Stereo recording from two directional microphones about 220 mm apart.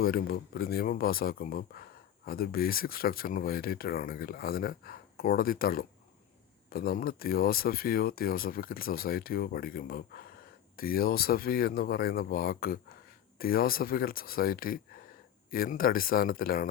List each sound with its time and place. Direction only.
0.0 s speech: 40° left (ahead or behind)